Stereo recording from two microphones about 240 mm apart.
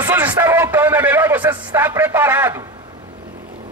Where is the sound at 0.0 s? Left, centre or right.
Centre.